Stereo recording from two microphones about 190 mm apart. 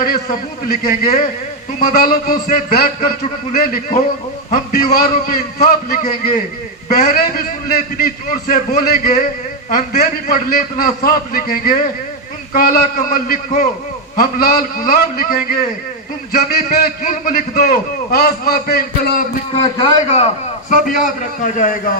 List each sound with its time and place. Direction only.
0.0 s a man's voice: 50° left (ahead or behind)
19.7 s a man's voice: 20° left (ahead or behind)
20.1 s a man's voice: 35° left (ahead or behind)